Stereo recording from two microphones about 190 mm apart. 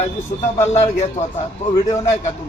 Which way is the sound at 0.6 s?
35° left (ahead or behind).